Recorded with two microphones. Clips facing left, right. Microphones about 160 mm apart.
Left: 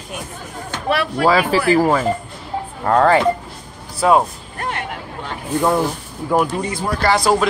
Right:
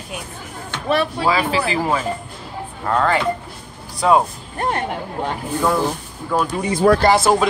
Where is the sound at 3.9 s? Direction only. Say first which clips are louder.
Left 1 dB; 5° left (ahead or behind).